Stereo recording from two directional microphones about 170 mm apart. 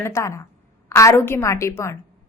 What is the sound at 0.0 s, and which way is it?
A woman's voice, 15° left (ahead or behind).